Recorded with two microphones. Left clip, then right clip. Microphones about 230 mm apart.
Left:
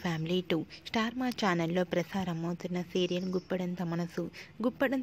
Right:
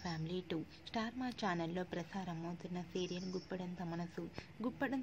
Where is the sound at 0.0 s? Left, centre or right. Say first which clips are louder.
Left 11 dB; left.